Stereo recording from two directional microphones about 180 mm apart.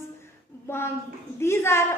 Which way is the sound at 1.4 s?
15° left (ahead or behind).